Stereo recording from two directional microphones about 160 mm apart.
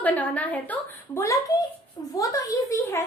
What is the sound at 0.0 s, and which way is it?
A woman's voice, 10° left (ahead or behind).